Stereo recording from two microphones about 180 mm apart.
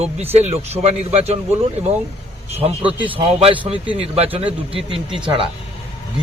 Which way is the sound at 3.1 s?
30° right (ahead or behind).